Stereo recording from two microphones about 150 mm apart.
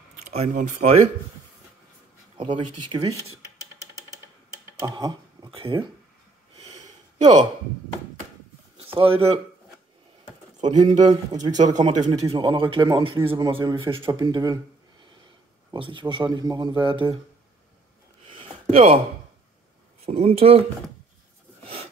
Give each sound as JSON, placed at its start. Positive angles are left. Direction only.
{"t": 0.6, "sound": "speech", "side_deg": -55}
{"t": 2.3, "sound": "speech", "side_deg": -35}
{"t": 4.7, "sound": "speech", "side_deg": -25}
{"t": 6.6, "sound": "a sound", "side_deg": -50}
{"t": 8.7, "sound": "speech", "side_deg": -40}
{"t": 10.7, "sound": "speech", "side_deg": -25}
{"t": 11.5, "sound": "speech", "side_deg": -55}
{"t": 11.8, "sound": "speech", "side_deg": -30}
{"t": 15.7, "sound": "speech", "side_deg": -35}
{"t": 18.4, "sound": "a sound", "side_deg": -40}
{"t": 20.1, "sound": "speech", "side_deg": -40}